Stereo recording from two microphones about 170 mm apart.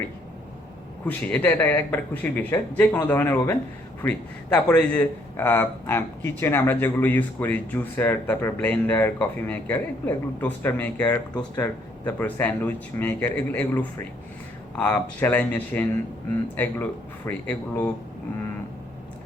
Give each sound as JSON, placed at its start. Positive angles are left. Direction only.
{"t": 1.0, "sound": "a man's voice", "side_deg": 10}